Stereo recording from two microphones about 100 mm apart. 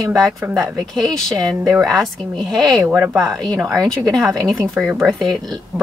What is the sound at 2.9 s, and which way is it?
Speech, 15° right (ahead or behind).